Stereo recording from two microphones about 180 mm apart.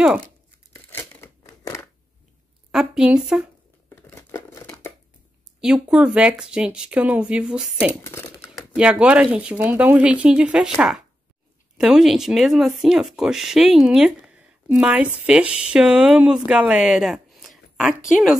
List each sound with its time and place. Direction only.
0.8 s a sound: 15° left (ahead or behind)
2.7 s speech: 5° right (ahead or behind)
3.9 s crumpling: 15° left (ahead or behind)
5.6 s speech: 5° right (ahead or behind)
8.0 s speech: 15° left (ahead or behind)
8.5 s speech: 5° right (ahead or behind)
11.8 s speech: centre (ahead or behind)